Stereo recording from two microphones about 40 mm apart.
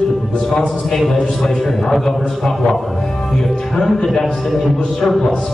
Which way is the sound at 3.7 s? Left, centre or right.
Centre.